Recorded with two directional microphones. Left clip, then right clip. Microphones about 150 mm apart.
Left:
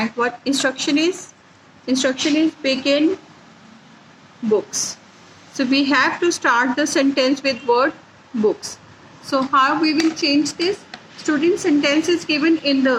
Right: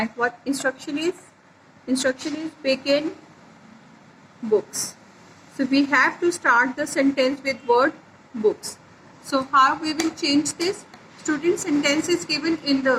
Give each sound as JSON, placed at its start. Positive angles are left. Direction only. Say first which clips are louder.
{"t": 0.0, "sound": "a woman's voice", "louder": "left 3 dB", "side_deg": 50}
{"t": 4.5, "sound": "a woman's voice", "louder": "left 2 dB", "side_deg": 50}